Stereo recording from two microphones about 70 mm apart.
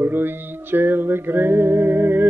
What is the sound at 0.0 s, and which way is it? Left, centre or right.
Music, right.